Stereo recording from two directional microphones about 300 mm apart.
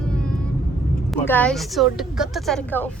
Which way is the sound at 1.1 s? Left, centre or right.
Centre.